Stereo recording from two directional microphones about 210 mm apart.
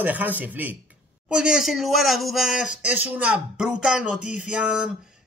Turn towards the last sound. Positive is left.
turn(degrees=-5)  # may be behind; listen again after turning